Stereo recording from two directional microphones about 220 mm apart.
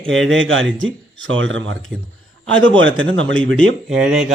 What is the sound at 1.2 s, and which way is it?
Speech, 60° right (ahead or behind).